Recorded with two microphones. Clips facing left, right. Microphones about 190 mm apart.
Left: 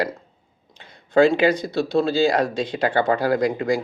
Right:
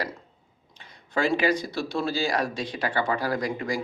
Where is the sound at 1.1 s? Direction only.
25° left (ahead or behind).